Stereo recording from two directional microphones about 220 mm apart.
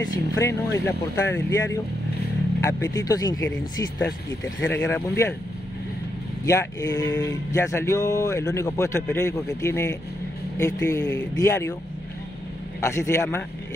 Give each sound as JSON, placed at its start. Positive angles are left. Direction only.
{"t": 0.0, "sound": "speech", "side_deg": 15}
{"t": 6.4, "sound": "speech", "side_deg": 15}
{"t": 12.8, "sound": "speech", "side_deg": 15}